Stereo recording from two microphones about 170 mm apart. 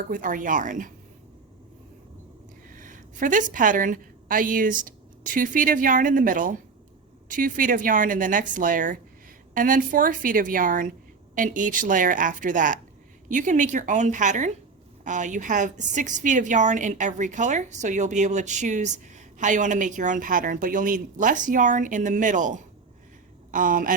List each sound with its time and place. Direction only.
0.1 s a woman's voice: 50° right (ahead or behind)
2.7 s a woman's voice: 50° right (ahead or behind)